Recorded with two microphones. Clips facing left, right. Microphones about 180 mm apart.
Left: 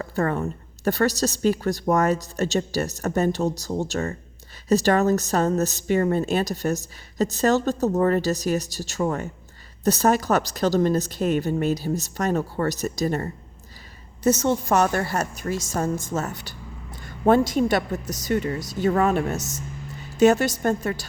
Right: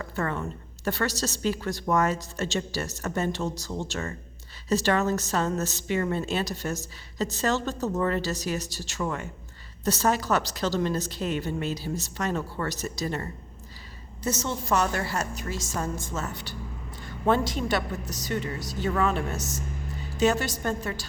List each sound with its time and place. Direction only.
0.0 s a woman's voice: 40° left (ahead or behind)